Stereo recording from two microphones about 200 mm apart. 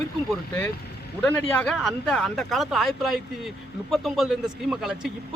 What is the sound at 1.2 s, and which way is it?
Speech, 5° left (ahead or behind).